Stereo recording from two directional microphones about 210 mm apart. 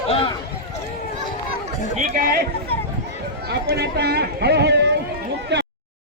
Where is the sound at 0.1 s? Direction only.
25° left (ahead or behind).